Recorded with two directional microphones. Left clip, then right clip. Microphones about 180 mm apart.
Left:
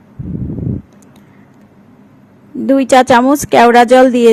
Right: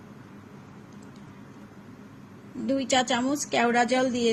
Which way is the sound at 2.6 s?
55° left (ahead or behind).